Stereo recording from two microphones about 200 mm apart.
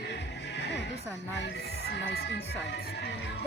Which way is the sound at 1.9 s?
55° left (ahead or behind).